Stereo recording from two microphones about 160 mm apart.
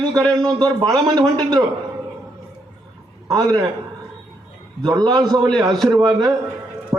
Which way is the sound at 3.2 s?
25° right (ahead or behind).